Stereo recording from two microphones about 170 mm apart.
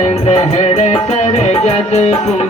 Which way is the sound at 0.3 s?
40° left (ahead or behind).